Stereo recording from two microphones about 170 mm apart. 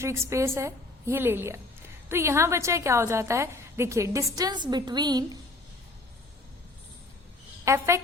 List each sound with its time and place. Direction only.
0.0 s a woman's voice: 15° right (ahead or behind)
7.6 s a woman's voice: 15° right (ahead or behind)